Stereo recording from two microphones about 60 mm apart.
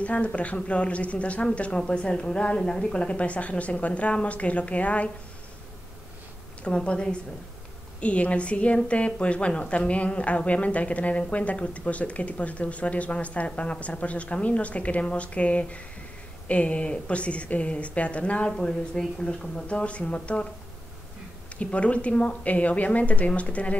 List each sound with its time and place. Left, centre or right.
0.0 s a woman's voice: left
6.6 s a woman's voice: centre
21.5 s a woman's voice: left